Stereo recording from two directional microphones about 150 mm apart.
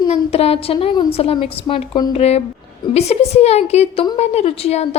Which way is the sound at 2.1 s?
45° left (ahead or behind).